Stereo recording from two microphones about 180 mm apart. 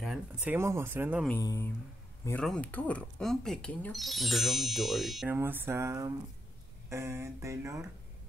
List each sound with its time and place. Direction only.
0.0 s speech: 5° right (ahead or behind)
1.4 s speech: 20° left (ahead or behind)
2.4 s speech: 5° left (ahead or behind)
5.3 s speech: 10° right (ahead or behind)